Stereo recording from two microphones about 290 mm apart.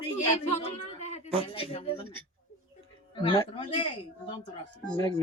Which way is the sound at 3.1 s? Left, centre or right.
Centre.